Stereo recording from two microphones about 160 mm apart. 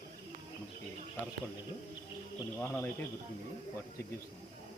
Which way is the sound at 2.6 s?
10° left (ahead or behind).